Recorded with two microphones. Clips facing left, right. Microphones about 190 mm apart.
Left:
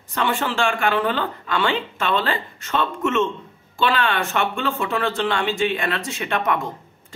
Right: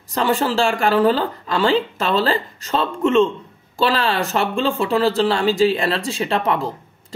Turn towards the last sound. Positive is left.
turn(degrees=-30)  # may be behind; listen again after turning